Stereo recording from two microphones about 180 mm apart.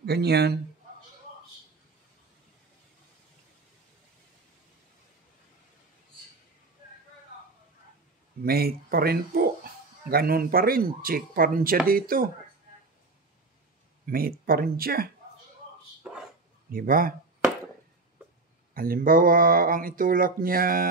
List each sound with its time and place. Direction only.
0.0 s speech: 65° right (ahead or behind)
8.5 s speech: 60° right (ahead or behind)
14.0 s speech: 55° right (ahead or behind)
16.0 s a sound: 5° right (ahead or behind)
16.7 s speech: 50° right (ahead or behind)
18.7 s speech: 55° right (ahead or behind)